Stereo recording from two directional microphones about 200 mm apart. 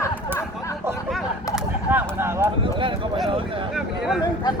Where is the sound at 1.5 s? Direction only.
10° right (ahead or behind).